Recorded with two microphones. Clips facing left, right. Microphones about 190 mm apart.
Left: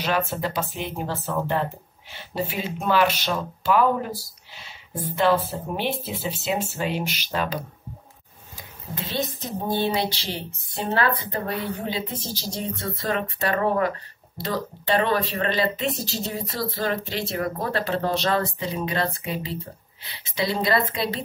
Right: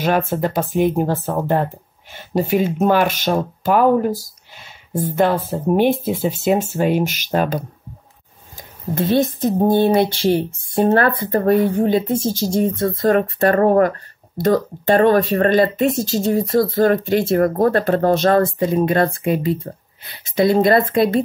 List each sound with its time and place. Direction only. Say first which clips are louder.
0.0 s speech: right 7 dB; 50° right (ahead or behind)
8.5 s speech: right 13 dB; 50° right (ahead or behind)